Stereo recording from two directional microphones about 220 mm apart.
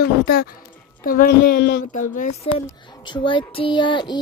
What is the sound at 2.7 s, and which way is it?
Speech, 20° left (ahead or behind).